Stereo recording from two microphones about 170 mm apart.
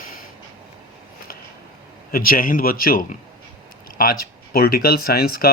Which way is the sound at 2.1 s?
55° left (ahead or behind).